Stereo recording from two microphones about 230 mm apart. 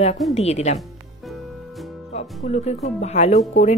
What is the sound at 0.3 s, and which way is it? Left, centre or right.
Speech, left.